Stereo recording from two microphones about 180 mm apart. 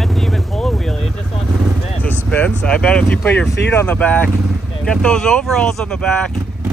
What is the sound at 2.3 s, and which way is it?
Speech, 5° left (ahead or behind).